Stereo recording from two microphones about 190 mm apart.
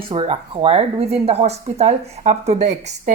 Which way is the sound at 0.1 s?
30° right (ahead or behind).